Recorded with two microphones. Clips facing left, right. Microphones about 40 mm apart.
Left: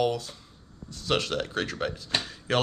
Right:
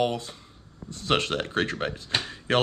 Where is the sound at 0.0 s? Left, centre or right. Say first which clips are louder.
Even; right.